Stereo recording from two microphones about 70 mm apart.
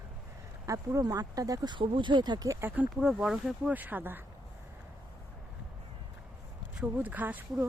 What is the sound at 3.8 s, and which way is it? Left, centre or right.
Speech, right.